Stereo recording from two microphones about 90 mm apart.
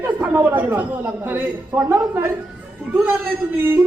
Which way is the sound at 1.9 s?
25° right (ahead or behind).